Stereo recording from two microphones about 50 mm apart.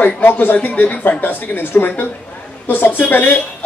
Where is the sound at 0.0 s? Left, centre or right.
Left.